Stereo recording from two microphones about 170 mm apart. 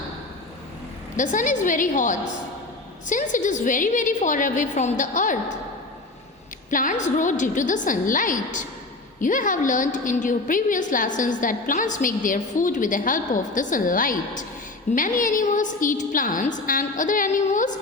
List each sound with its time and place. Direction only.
1.1 s a woman's voice: 50° left (ahead or behind)
6.7 s a woman's voice: 50° left (ahead or behind)